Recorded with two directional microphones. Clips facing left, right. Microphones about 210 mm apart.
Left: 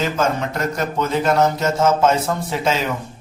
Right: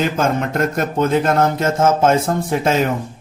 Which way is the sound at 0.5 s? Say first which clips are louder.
Right 3 dB; 50° right (ahead or behind).